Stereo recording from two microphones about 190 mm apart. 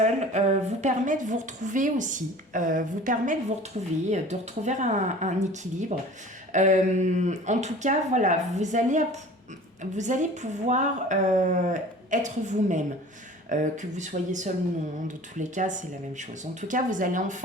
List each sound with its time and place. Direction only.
0.0 s a woman's voice: 35° right (ahead or behind)